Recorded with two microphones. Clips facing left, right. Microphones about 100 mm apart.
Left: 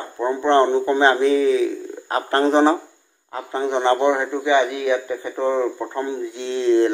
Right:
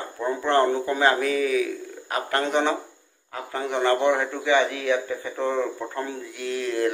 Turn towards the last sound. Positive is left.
turn(degrees=25)  # may be behind; listen again after turning